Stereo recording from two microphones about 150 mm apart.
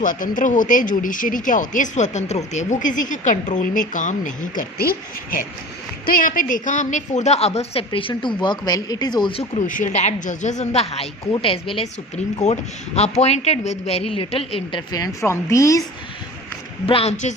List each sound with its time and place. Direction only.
0.0 s speech: 60° left (ahead or behind); by 5.4 s 75° left (ahead or behind)
6.1 s a woman's voice: 65° left (ahead or behind); by 9.4 s 30° left (ahead or behind)
9.4 s a woman's voice: 55° left (ahead or behind); by 15.8 s 20° left (ahead or behind)
16.8 s a woman's voice: 40° left (ahead or behind)